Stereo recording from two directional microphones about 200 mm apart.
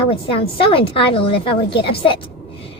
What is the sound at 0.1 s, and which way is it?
A woman's voice, 30° left (ahead or behind).